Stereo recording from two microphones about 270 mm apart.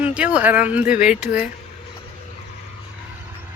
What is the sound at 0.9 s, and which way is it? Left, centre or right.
Speech, left.